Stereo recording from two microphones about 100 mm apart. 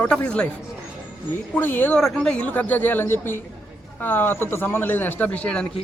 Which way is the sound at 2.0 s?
5° left (ahead or behind).